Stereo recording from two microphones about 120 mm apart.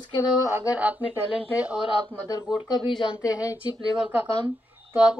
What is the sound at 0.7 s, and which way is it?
Speech, 10° right (ahead or behind).